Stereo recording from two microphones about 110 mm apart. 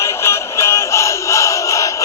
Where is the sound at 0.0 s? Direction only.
25° left (ahead or behind).